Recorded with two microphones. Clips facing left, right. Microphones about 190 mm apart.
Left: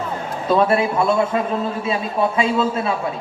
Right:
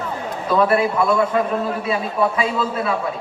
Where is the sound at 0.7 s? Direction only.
25° left (ahead or behind).